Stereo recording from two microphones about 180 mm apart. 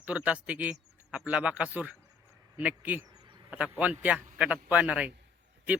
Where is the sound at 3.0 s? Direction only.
20° right (ahead or behind).